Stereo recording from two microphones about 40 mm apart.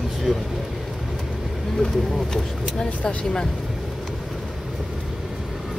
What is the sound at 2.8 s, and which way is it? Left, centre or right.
Speech, left.